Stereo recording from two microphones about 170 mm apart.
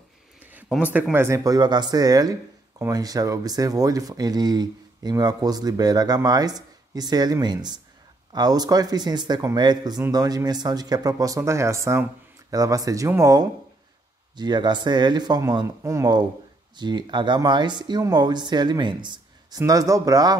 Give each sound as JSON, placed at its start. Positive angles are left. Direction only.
{"t": 0.5, "sound": "speech", "side_deg": -10}